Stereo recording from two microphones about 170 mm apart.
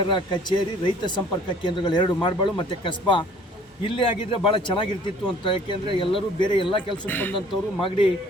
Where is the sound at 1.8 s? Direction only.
25° left (ahead or behind).